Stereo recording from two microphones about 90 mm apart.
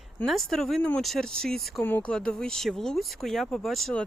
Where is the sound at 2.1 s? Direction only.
10° left (ahead or behind).